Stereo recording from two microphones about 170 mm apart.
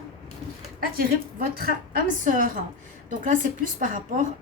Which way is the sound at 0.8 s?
60° right (ahead or behind).